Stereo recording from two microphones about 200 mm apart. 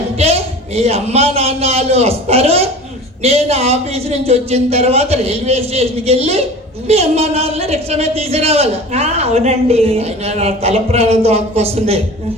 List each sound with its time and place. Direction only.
0.2 s a woman's voice: 30° right (ahead or behind)